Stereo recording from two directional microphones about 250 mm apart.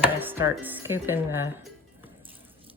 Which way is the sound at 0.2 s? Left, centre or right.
Centre.